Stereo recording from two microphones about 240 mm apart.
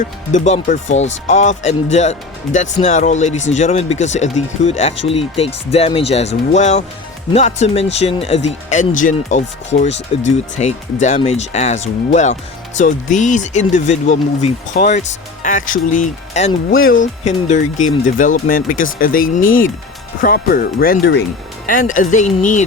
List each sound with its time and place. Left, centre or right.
0.3 s speech: left
21.7 s speech: left